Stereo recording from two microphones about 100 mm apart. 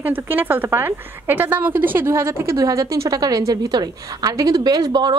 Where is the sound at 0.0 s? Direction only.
20° right (ahead or behind).